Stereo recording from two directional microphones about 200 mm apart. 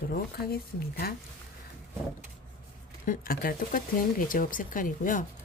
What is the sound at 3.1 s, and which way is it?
Speech, 45° left (ahead or behind).